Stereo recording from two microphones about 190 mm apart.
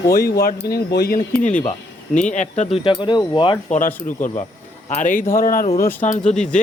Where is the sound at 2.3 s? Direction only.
40° left (ahead or behind).